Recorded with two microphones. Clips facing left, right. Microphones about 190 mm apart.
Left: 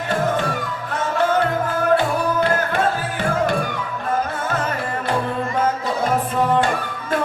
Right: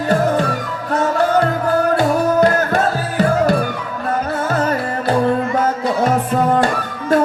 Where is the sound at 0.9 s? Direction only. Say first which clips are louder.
Right 4 dB; 40° right (ahead or behind).